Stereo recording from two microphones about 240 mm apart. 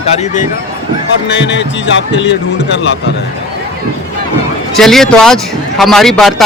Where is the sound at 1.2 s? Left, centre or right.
Left.